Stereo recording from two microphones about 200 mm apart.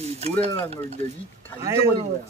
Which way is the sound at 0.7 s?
35° right (ahead or behind).